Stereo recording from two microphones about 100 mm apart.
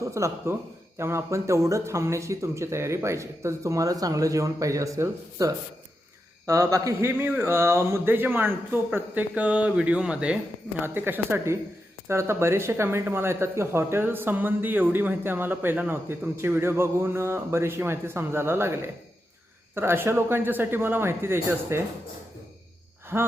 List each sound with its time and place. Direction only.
0.0 s speech: 30° right (ahead or behind); by 10.3 s 10° right (ahead or behind)
10.8 s speech: 20° right (ahead or behind)
23.1 s speech: 25° right (ahead or behind)